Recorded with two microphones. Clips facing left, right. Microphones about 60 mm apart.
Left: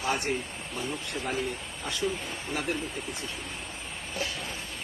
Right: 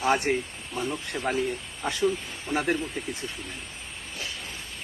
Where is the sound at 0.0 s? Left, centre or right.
Right.